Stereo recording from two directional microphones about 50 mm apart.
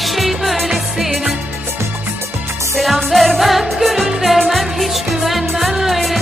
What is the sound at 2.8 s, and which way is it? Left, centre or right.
Music, centre.